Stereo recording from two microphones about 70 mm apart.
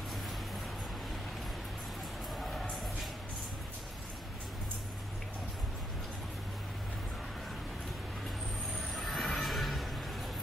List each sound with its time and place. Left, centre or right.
8.9 s music: centre